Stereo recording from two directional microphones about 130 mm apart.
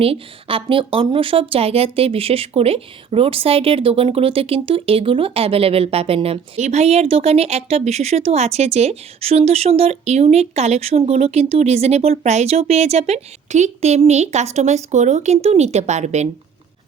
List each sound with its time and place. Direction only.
0.0 s a woman's voice: 45° right (ahead or behind); by 16.3 s 60° right (ahead or behind)